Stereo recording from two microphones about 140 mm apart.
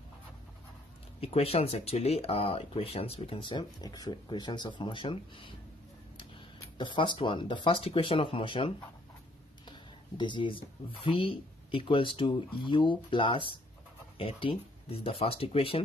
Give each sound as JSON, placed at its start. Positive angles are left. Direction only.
{"t": 1.2, "sound": "speech", "side_deg": 45}
{"t": 6.8, "sound": "speech", "side_deg": 35}